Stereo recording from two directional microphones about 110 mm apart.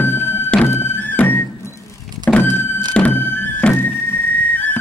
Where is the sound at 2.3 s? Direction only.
10° left (ahead or behind).